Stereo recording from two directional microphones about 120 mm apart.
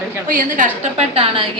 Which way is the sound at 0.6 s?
75° right (ahead or behind).